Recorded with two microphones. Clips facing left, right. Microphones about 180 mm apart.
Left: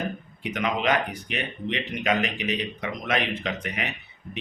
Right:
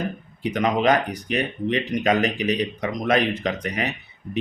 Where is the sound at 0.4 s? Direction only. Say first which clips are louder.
Right 6 dB; 35° right (ahead or behind).